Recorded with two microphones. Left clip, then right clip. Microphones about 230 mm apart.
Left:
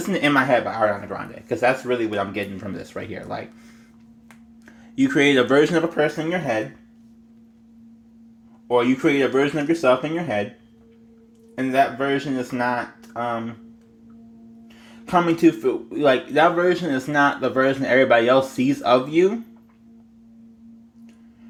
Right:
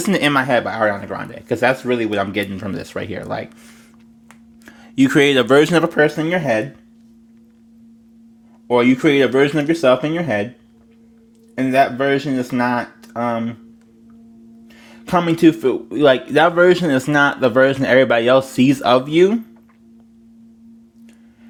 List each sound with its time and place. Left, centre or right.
0.0 s a man's voice: right
4.6 s a man's voice: right
8.6 s speech: right
11.5 s speech: right
15.0 s a man's voice: right